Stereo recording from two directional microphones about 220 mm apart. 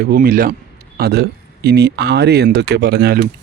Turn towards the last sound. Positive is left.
turn(degrees=-45)  # may be behind; listen again after turning